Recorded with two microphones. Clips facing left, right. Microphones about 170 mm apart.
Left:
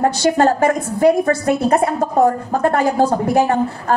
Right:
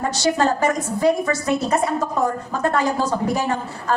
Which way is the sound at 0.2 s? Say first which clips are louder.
Left 2 dB; 55° left (ahead or behind).